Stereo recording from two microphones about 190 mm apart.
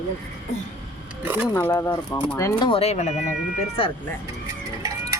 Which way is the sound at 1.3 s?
10° right (ahead or behind).